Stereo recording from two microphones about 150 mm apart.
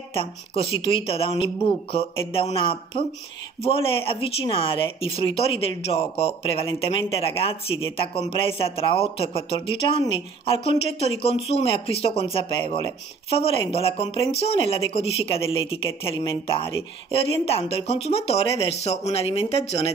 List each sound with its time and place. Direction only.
0.1 s speech: 40° left (ahead or behind)